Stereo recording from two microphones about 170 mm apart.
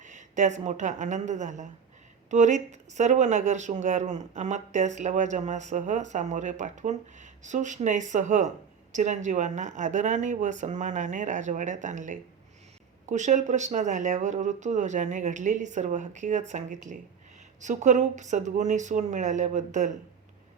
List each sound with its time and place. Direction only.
0.0 s a woman's voice: 45° right (ahead or behind)